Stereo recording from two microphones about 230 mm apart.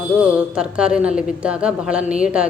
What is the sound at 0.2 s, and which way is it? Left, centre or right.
Speech, centre.